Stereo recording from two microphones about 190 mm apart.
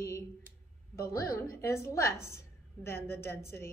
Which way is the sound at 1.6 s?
15° left (ahead or behind).